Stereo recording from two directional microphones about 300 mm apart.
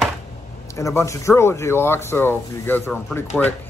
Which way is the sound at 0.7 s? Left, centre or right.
Centre.